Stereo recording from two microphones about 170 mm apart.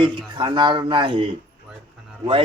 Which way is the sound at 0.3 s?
25° right (ahead or behind).